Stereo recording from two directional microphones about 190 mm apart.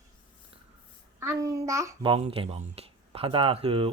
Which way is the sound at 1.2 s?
15° right (ahead or behind).